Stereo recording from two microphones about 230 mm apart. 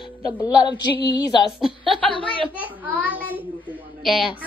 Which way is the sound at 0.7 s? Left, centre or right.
Centre.